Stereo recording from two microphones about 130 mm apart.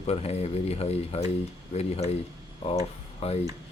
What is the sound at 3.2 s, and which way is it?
Speech, 50° left (ahead or behind).